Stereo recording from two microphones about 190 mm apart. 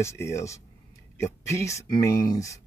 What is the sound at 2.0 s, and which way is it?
Speech, 55° left (ahead or behind).